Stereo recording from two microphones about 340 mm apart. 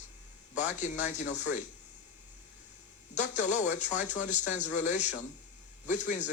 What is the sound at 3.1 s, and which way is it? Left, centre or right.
Speech, left.